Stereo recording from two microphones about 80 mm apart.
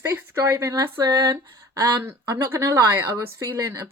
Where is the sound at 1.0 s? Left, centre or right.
Right.